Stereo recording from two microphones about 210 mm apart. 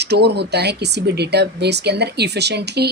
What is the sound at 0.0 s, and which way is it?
Speech, 50° right (ahead or behind).